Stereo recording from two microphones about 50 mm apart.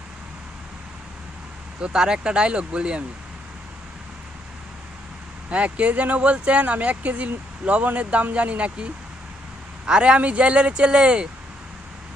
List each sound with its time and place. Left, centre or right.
1.8 s speech: centre
5.5 s speech: right